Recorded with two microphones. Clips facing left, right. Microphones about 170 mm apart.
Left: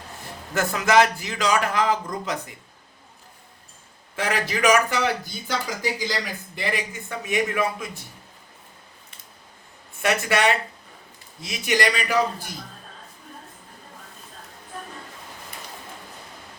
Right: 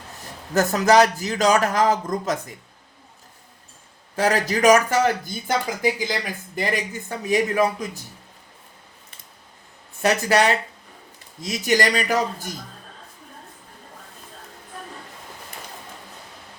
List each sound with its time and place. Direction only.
0.5 s speech: 40° right (ahead or behind)
4.1 s speech: 40° right (ahead or behind)
7.1 s speech: 35° right (ahead or behind)
10.0 s speech: 35° right (ahead or behind)